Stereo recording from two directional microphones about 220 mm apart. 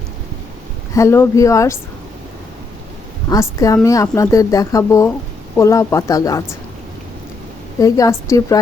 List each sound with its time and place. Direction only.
0.9 s speech: 10° left (ahead or behind)
3.2 s speech: 15° left (ahead or behind)
7.8 s speech: 15° left (ahead or behind)